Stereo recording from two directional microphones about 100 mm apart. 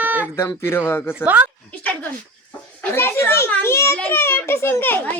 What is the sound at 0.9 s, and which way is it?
Speech, 25° left (ahead or behind).